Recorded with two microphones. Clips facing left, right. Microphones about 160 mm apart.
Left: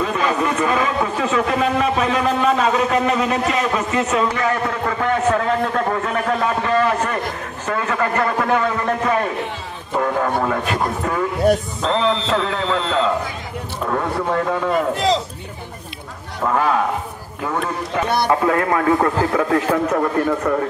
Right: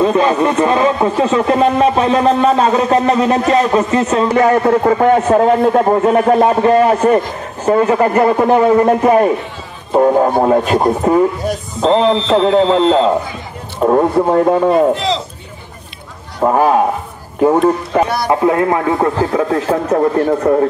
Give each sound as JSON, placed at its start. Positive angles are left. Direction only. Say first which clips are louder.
{"t": 0.0, "sound": "speech", "louder": "right 8 dB", "side_deg": -30}
{"t": 7.7, "sound": "a man's voice", "louder": "right 9 dB", "side_deg": -25}
{"t": 16.3, "sound": "speech", "louder": "right 7 dB", "side_deg": -35}
{"t": 18.3, "sound": "a man's voice", "louder": "right 6 dB", "side_deg": -20}
{"t": 19.9, "sound": "speech", "louder": "right 6 dB", "side_deg": -35}